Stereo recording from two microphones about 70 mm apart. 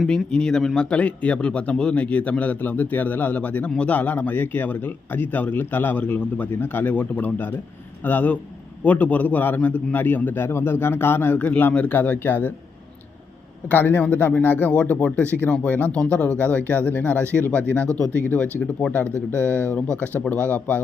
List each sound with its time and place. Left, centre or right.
0.3 s a man's voice: centre; by 12.5 s left
13.7 s a man's voice: left